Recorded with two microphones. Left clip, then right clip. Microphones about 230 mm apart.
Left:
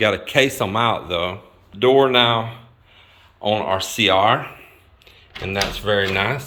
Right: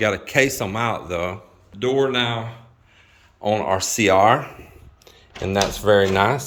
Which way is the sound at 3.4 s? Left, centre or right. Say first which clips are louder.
Even; centre.